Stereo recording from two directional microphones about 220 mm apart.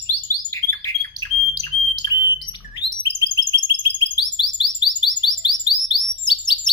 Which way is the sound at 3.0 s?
20° left (ahead or behind).